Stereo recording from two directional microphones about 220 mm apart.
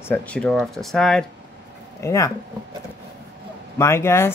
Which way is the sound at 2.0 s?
15° left (ahead or behind).